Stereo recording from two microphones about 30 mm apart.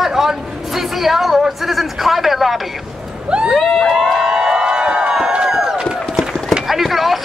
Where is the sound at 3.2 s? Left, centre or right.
Right.